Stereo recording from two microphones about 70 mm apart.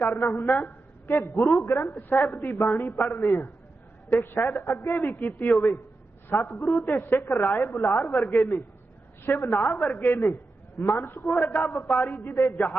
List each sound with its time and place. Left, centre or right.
0.0 s a woman's voice: left